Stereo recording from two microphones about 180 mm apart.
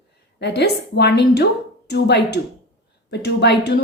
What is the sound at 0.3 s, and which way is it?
A woman's voice, 70° left (ahead or behind).